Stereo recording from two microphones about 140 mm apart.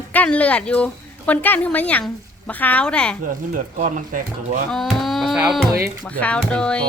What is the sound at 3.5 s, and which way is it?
Speech, 70° right (ahead or behind).